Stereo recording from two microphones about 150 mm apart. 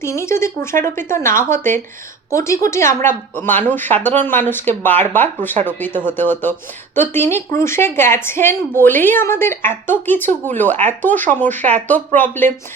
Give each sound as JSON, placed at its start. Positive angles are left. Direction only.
{"t": 0.0, "sound": "speech", "side_deg": 20}